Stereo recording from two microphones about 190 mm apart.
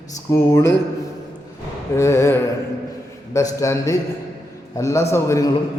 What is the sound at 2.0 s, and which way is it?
A man's voice, 15° left (ahead or behind).